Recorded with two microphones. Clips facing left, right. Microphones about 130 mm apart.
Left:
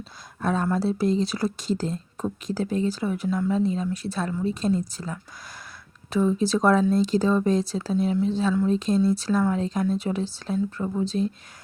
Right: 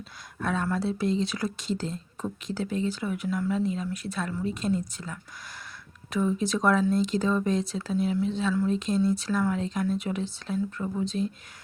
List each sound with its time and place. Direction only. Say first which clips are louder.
0.3 s speech: left 4 dB; 35° left (ahead or behind)